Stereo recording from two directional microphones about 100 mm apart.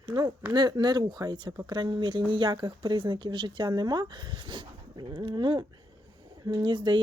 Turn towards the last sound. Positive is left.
turn(degrees=-50)  # may be behind; listen again after turning